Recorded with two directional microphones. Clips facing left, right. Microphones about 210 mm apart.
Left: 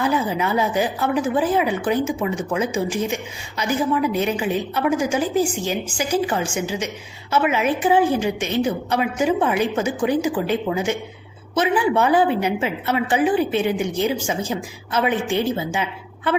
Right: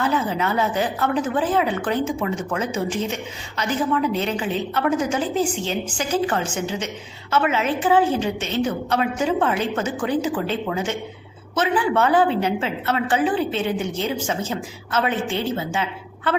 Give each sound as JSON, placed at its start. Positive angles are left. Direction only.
{"t": 0.0, "sound": "a woman's voice", "side_deg": 10}